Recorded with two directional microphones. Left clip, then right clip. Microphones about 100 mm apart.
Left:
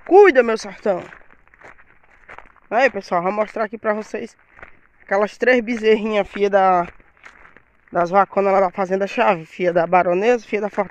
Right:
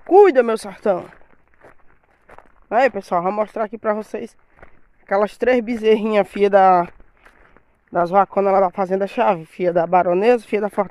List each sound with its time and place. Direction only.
0.0 s speech: 5° right (ahead or behind)
0.4 s speech: 20° right (ahead or behind)
2.7 s speech: 30° right (ahead or behind)
3.0 s speech: 15° right (ahead or behind)
6.1 s speech: 55° right (ahead or behind)
7.9 s speech: 20° right (ahead or behind)
10.1 s speech: 35° right (ahead or behind)